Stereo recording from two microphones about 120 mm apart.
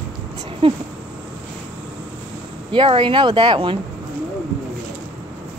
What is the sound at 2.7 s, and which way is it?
Speech, 45° right (ahead or behind).